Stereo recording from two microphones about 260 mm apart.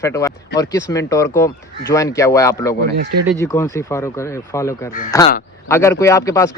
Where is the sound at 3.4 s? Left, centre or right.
Centre.